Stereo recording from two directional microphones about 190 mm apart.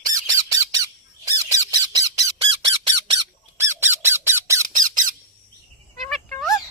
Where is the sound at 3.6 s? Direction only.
15° right (ahead or behind).